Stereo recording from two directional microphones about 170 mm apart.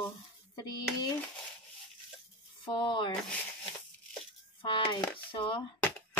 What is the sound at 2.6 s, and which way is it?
Speech, 25° left (ahead or behind).